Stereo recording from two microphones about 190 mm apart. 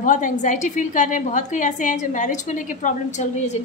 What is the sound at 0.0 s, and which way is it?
A woman's voice, 40° left (ahead or behind).